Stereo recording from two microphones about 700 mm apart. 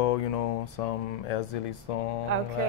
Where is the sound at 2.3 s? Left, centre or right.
Right.